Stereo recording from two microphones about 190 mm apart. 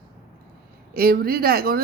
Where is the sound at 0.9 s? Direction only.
50° right (ahead or behind).